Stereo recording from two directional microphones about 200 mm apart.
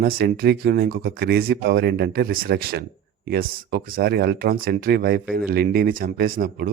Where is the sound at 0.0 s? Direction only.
50° right (ahead or behind).